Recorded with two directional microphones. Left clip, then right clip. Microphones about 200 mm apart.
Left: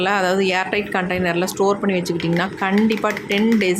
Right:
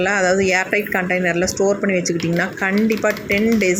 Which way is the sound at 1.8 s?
Centre (ahead or behind).